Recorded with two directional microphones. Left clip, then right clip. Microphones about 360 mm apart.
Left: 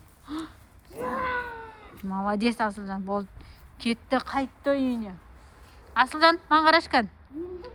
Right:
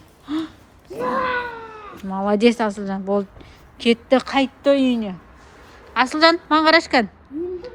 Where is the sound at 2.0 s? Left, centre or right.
Centre.